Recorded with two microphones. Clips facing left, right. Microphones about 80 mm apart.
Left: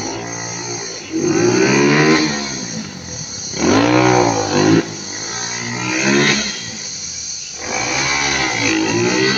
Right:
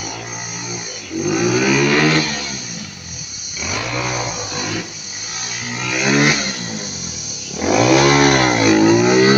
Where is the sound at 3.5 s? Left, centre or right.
Left.